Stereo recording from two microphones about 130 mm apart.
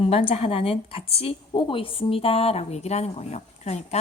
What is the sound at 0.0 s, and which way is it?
A woman's voice, 45° left (ahead or behind).